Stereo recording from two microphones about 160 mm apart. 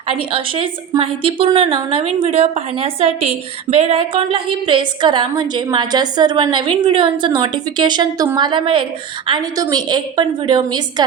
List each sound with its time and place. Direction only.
0.2 s a woman's voice: 35° right (ahead or behind)